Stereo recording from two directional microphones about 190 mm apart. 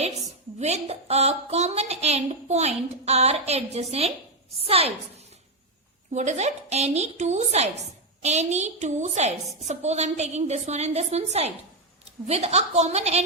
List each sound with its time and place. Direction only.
0.0 s a woman's voice: 35° right (ahead or behind)